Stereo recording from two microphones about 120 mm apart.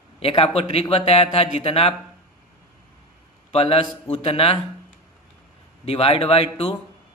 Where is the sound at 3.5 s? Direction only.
60° left (ahead or behind).